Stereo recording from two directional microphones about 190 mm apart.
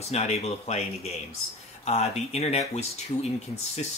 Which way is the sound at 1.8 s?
35° left (ahead or behind).